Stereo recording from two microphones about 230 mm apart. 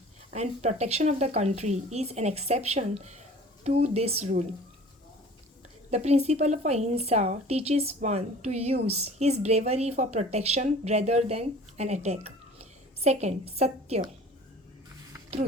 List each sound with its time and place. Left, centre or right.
0.3 s a woman's voice: right
5.9 s a woman's voice: right